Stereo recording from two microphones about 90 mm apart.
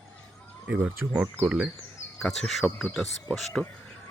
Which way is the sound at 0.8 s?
20° right (ahead or behind).